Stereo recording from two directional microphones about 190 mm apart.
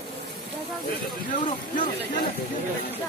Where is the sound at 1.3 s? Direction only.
45° left (ahead or behind).